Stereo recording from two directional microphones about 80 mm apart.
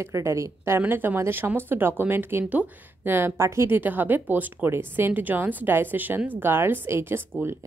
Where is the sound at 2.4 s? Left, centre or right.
Centre.